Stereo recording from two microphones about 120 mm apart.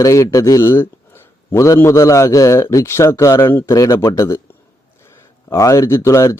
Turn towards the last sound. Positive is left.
turn(degrees=25)  # may be behind; listen again after turning